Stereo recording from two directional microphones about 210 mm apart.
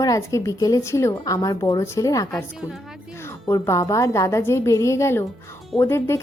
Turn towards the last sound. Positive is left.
turn(degrees=10)  # may be behind; listen again after turning